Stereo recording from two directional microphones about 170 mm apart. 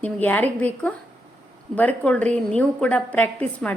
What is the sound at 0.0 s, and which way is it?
A woman's voice, 10° left (ahead or behind).